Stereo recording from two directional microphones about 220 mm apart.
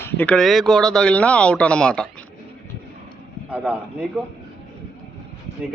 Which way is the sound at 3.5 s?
5° right (ahead or behind).